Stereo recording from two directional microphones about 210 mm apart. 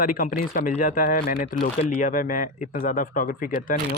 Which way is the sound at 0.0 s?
40° left (ahead or behind).